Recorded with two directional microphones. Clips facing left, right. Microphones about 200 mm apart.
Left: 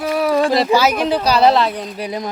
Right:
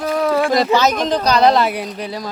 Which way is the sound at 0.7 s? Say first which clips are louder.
Left 1 dB; 10° left (ahead or behind).